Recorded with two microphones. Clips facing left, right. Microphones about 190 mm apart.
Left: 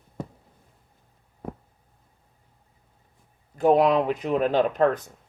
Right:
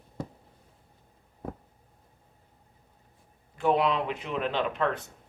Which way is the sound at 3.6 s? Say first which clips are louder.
Left 6 dB; 40° left (ahead or behind).